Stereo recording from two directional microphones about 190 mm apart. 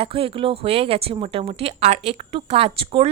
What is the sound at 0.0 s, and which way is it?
A woman's voice, 30° right (ahead or behind).